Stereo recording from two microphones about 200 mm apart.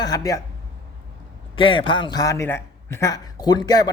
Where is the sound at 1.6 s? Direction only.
25° left (ahead or behind).